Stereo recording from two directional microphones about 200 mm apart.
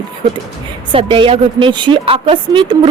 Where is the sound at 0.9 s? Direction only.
25° right (ahead or behind).